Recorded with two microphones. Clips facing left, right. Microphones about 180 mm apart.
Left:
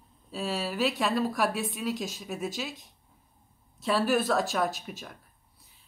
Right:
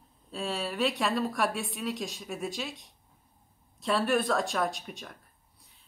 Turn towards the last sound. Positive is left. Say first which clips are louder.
# left 1 dB
turn(degrees=0)  # may be behind; listen again after turning